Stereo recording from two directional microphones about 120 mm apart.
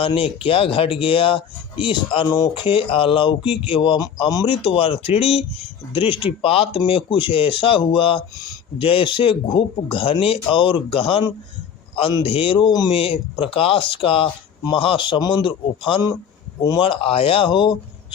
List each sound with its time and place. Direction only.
0.0 s speech: 45° left (ahead or behind)
4.4 s a man's voice: 50° left (ahead or behind)
12.9 s a man's voice: 50° left (ahead or behind)
16.8 s speech: 50° left (ahead or behind)